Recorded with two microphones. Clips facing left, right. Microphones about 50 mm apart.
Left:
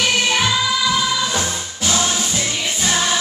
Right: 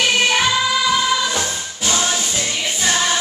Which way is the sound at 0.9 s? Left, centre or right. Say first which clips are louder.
Right 1 dB; centre.